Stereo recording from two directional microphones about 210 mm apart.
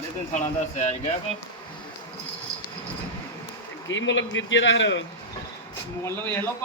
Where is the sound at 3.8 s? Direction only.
60° left (ahead or behind).